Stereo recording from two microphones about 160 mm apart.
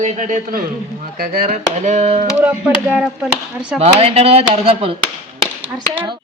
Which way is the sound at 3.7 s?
40° right (ahead or behind).